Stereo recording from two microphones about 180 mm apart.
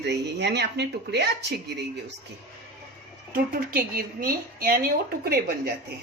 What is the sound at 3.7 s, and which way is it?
Speech, 55° right (ahead or behind).